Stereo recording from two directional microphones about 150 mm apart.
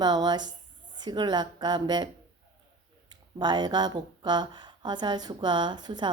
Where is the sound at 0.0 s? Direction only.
30° right (ahead or behind).